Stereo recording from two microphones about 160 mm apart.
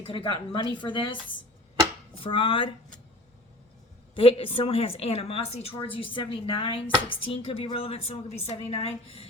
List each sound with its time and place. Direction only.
0.2 s a woman's voice: 30° left (ahead or behind)
4.1 s a woman's voice: 35° left (ahead or behind)